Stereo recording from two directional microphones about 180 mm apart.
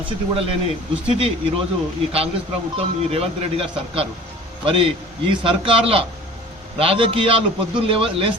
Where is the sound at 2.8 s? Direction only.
35° right (ahead or behind).